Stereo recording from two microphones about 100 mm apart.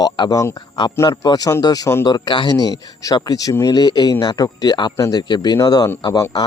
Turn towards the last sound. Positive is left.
turn(degrees=35)  # may be behind; listen again after turning